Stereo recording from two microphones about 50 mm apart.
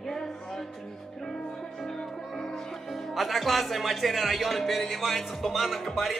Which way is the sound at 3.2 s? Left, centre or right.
Centre.